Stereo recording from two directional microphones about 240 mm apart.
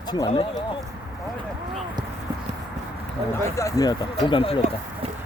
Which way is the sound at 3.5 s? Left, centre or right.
Centre.